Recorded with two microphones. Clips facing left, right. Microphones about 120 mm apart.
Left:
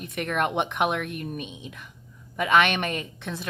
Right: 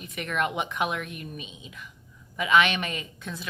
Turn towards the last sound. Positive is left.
turn(degrees=55)  # may be behind; listen again after turning